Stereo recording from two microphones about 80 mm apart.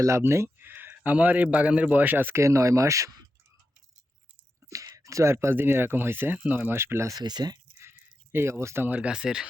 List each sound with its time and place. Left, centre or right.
0.0 s speech: right
4.7 s speech: right
7.1 s speech: right
7.8 s a sound: right
9.0 s speech: centre